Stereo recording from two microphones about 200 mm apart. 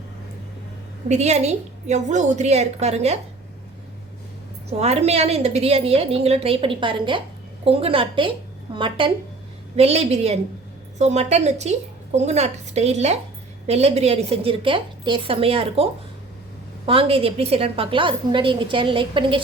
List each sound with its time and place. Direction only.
1.0 s a woman's voice: 35° right (ahead or behind)
4.8 s a woman's voice: 30° right (ahead or behind)